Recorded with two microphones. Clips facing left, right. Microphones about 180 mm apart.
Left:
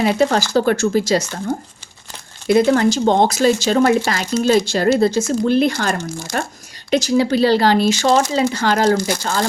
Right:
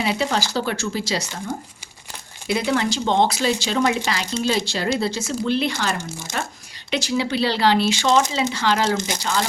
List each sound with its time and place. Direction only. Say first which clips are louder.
0.0 s speech: left 6 dB; 45° left (ahead or behind)